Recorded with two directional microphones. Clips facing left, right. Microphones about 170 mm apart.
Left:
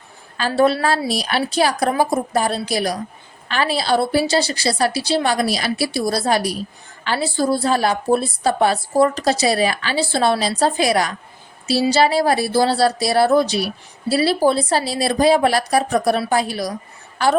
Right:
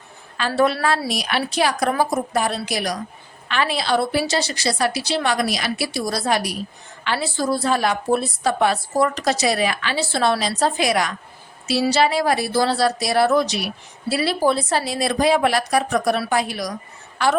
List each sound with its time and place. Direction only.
0.3 s a woman's voice: 35° left (ahead or behind)